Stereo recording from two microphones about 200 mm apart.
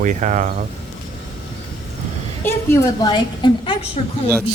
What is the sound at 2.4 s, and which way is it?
A woman's voice, 15° left (ahead or behind).